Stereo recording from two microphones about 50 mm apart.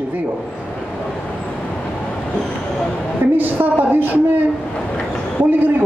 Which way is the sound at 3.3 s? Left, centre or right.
Right.